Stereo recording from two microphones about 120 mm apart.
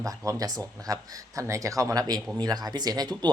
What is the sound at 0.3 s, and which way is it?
Speech, 30° right (ahead or behind).